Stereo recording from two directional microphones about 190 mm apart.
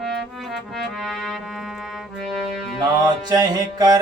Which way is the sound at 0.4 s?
Centre (ahead or behind).